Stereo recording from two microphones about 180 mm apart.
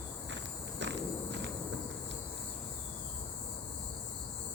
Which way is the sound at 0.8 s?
80° right.